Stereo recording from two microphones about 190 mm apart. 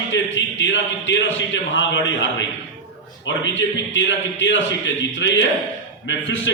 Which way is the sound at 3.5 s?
75° left (ahead or behind).